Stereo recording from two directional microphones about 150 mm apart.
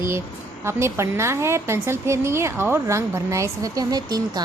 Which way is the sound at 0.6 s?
15° right (ahead or behind).